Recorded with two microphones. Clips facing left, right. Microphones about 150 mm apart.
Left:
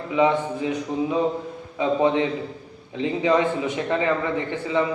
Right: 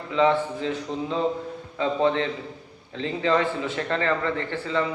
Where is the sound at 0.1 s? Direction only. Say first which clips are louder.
Left 1 dB; 15° left (ahead or behind).